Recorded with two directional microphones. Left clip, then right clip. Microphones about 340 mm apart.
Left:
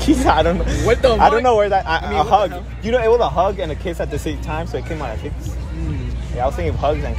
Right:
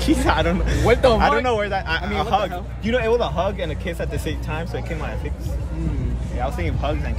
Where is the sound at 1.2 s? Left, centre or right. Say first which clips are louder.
Left 6 dB; centre.